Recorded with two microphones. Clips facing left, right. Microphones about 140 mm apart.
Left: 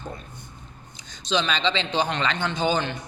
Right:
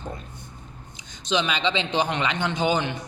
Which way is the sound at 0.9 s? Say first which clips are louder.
Even; 15° right (ahead or behind).